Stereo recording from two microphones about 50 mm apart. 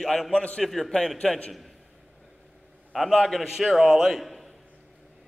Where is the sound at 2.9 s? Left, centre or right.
Centre.